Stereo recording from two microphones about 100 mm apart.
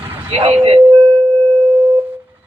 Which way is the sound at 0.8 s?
50° right (ahead or behind).